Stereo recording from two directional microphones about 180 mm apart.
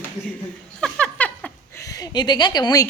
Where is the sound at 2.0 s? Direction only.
25° left (ahead or behind).